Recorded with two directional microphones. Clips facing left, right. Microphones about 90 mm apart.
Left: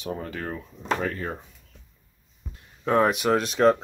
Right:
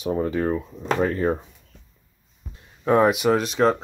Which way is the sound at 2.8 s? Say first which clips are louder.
Right 3 dB; 10° right (ahead or behind).